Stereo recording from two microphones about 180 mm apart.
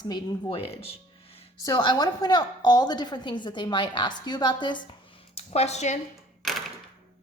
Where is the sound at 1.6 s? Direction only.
20° left (ahead or behind).